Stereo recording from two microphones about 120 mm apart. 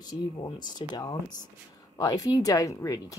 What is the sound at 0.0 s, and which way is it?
Speech, 35° left (ahead or behind).